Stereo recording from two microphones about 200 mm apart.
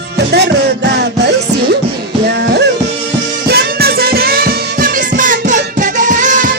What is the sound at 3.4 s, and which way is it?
Music, 50° right (ahead or behind).